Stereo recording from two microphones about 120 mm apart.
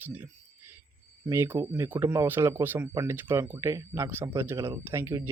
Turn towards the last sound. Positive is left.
turn(degrees=-20)  # may be behind; listen again after turning